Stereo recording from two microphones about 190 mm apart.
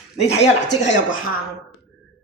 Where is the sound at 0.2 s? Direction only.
35° left (ahead or behind).